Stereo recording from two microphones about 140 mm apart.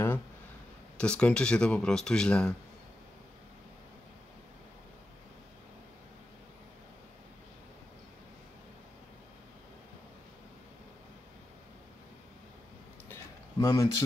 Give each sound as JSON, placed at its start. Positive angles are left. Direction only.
{"t": 0.9, "sound": "speech", "side_deg": 5}
{"t": 13.6, "sound": "speech", "side_deg": 25}